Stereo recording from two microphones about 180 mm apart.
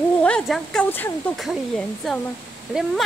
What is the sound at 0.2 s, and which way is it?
Speech, 5° left (ahead or behind).